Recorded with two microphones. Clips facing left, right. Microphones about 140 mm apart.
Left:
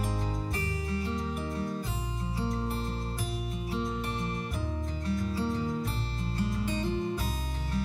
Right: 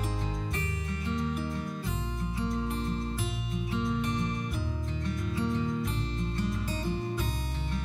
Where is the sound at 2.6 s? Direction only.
35° left (ahead or behind).